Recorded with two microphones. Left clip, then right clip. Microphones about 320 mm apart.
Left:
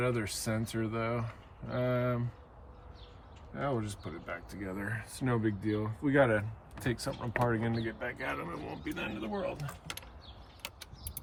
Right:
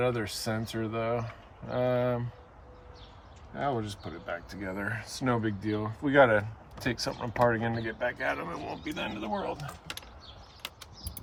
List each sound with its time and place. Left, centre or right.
0.0 s speech: centre
3.5 s speech: centre